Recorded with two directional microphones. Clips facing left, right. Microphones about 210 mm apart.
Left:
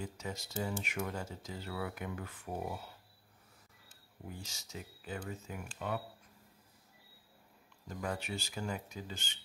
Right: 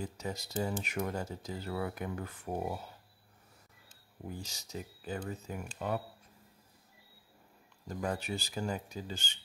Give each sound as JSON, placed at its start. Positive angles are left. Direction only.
{"t": 0.0, "sound": "speech", "side_deg": -35}
{"t": 4.4, "sound": "speech", "side_deg": -35}
{"t": 7.9, "sound": "speech", "side_deg": -35}